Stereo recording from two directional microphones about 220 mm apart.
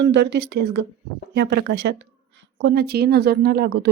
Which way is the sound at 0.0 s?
55° right (ahead or behind).